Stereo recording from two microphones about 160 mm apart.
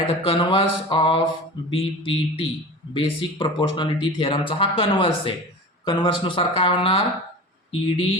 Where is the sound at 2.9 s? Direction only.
30° left (ahead or behind).